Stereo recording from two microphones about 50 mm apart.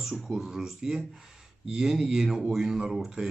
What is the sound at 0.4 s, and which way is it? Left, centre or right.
Speech, centre.